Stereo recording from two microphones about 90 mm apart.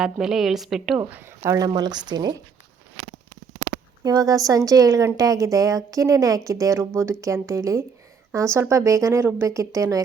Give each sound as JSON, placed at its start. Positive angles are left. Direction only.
{"t": 0.0, "sound": "a woman's voice", "side_deg": -5}
{"t": 0.9, "sound": "speech", "side_deg": -25}
{"t": 1.5, "sound": "a woman's voice", "side_deg": -45}
{"t": 4.0, "sound": "a woman's voice", "side_deg": -45}